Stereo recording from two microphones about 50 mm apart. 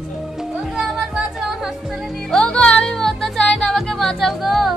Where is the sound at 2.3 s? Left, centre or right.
Left.